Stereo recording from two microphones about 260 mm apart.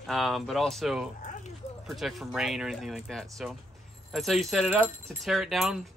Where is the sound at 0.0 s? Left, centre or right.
Centre.